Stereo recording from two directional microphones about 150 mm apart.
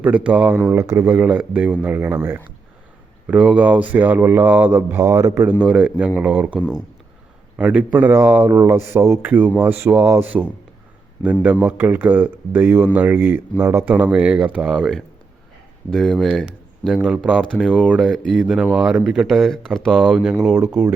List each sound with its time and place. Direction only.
0.0 s speech: 10° right (ahead or behind)
5.5 s speech: 5° right (ahead or behind)
7.6 s speech: 10° right (ahead or behind)
20.5 s speech: 15° right (ahead or behind)